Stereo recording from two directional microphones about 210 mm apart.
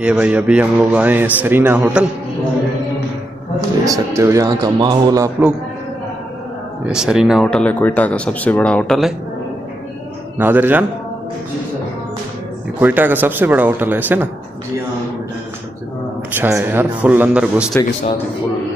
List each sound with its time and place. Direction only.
0.0 s a man's voice: 5° right (ahead or behind)
3.8 s a man's voice: 15° right (ahead or behind)
6.9 s speech: 5° right (ahead or behind)
10.3 s a man's voice: 10° right (ahead or behind)
12.8 s a man's voice: 10° right (ahead or behind)
16.3 s a man's voice: 10° right (ahead or behind)